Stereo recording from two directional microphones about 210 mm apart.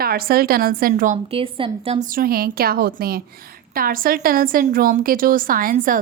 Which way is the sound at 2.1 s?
45° right (ahead or behind).